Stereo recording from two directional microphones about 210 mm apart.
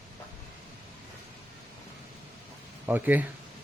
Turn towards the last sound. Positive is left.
turn(degrees=-10)  # may be behind; listen again after turning